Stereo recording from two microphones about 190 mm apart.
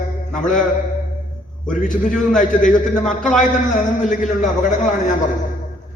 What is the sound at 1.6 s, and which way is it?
Speech, 5° left (ahead or behind).